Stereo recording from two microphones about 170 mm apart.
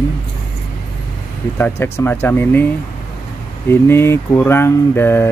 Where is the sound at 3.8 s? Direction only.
15° left (ahead or behind).